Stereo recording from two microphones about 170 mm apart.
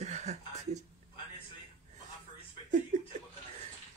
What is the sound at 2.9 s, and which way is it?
Laughter, 50° right (ahead or behind).